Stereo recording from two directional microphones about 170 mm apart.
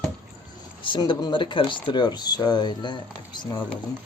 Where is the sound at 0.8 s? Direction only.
25° left (ahead or behind).